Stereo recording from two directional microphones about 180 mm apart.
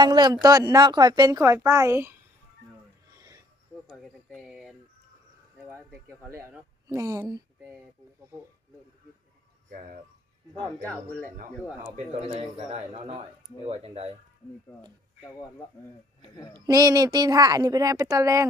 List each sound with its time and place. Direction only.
0.0 s speech: 25° right (ahead or behind)
3.2 s a sound: 20° right (ahead or behind)
3.8 s a woman's voice: centre (ahead or behind); by 7.7 s 20° right (ahead or behind)
9.6 s speech: 55° right (ahead or behind)
11.9 s speech: 35° right (ahead or behind)
16.6 s speech: 20° right (ahead or behind)